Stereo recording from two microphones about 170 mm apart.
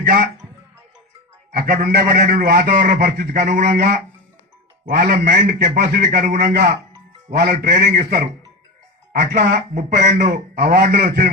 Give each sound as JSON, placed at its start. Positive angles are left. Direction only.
{"t": 1.5, "sound": "a man's voice", "side_deg": -65}
{"t": 3.4, "sound": "speech", "side_deg": -50}
{"t": 5.1, "sound": "a man's voice", "side_deg": -50}
{"t": 9.1, "sound": "speech", "side_deg": -75}
{"t": 9.7, "sound": "speech", "side_deg": -45}
{"t": 10.3, "sound": "a man's voice", "side_deg": -60}